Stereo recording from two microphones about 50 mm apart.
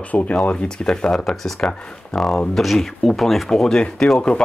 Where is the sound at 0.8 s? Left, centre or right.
Centre.